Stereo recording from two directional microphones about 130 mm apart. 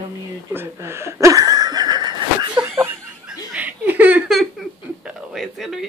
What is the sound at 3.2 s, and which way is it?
Laughter, 10° right (ahead or behind).